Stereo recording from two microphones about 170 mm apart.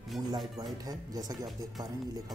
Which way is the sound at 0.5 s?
20° right (ahead or behind).